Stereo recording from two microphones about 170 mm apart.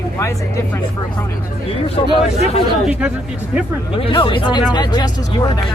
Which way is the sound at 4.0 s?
30° left (ahead or behind).